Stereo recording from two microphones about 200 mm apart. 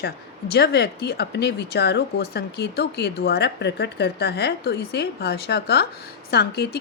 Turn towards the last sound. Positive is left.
turn(degrees=50)  # may be behind; listen again after turning